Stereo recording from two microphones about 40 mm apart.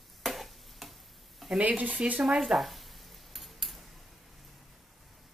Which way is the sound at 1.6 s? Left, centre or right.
Right.